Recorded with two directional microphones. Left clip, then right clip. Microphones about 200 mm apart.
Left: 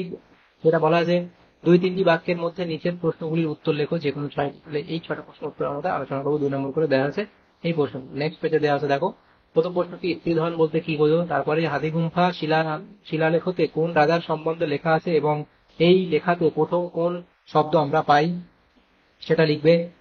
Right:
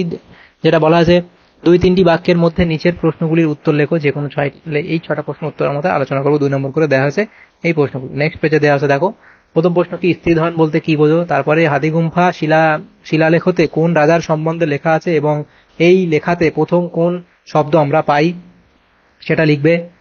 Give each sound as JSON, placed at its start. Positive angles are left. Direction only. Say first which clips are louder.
{"t": 0.6, "sound": "a man's voice", "louder": "right 8 dB", "side_deg": -40}
{"t": 19.2, "sound": "a man's voice", "louder": "right 6 dB", "side_deg": -35}